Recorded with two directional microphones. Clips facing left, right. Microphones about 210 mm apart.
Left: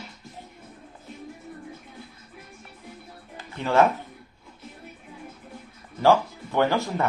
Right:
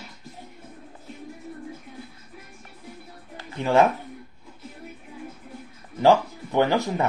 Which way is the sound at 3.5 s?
15° right (ahead or behind).